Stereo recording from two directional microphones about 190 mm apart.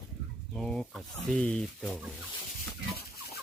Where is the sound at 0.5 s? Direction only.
5° left (ahead or behind).